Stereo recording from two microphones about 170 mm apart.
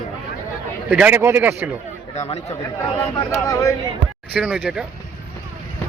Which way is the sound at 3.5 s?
20° left (ahead or behind).